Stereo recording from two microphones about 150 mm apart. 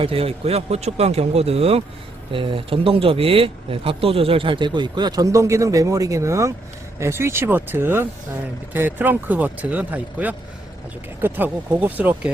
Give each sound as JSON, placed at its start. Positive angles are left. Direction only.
{"t": 0.0, "sound": "speech", "side_deg": -40}